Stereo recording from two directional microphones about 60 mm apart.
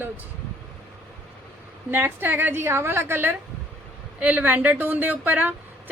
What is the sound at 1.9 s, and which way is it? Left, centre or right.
A woman's voice, right.